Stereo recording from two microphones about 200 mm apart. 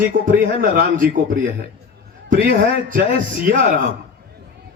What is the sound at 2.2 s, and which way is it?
A man's voice, 45° right (ahead or behind).